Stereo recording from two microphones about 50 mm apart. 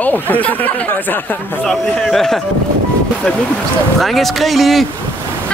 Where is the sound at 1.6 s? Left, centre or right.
Centre.